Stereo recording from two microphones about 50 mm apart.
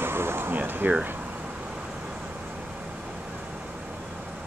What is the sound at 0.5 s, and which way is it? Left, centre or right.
Speech, right.